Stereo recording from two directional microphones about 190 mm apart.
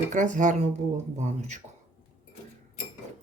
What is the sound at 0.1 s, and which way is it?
Speech, 40° right (ahead or behind).